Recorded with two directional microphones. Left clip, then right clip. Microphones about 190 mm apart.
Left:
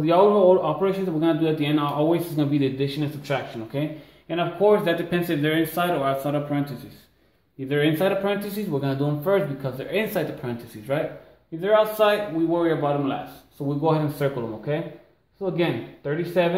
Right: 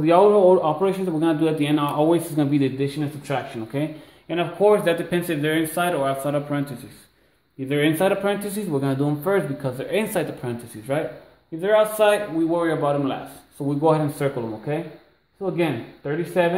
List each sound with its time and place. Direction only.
0.0 s a man's voice: 40° right (ahead or behind)
7.6 s a man's voice: 45° right (ahead or behind)